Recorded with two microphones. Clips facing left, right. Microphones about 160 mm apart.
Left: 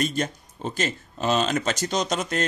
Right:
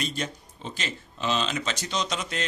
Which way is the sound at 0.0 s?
50° left (ahead or behind).